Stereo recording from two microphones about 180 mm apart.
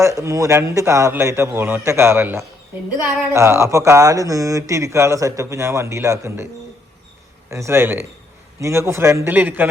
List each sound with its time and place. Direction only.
0.0 s speech: 15° right (ahead or behind)
7.5 s speech: 15° right (ahead or behind)